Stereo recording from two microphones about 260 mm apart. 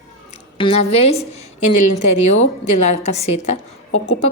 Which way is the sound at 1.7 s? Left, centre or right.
Left.